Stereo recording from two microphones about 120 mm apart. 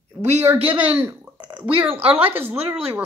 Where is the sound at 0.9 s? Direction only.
15° right (ahead or behind).